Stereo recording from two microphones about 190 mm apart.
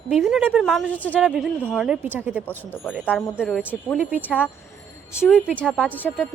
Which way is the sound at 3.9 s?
10° right (ahead or behind).